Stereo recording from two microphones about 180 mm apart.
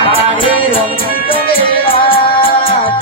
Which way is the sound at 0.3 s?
30° left (ahead or behind).